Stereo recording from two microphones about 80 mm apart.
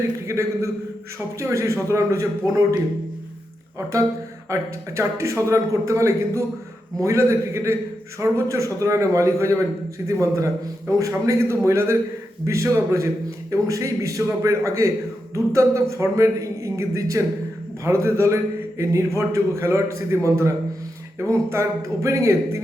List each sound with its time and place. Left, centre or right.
0.3 s a man's voice: right
4.4 s a man's voice: right